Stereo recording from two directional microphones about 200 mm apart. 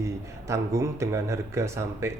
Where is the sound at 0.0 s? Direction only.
15° right (ahead or behind).